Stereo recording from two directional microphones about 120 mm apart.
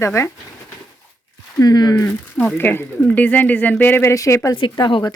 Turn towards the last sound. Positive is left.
turn(degrees=40)  # may be behind; listen again after turning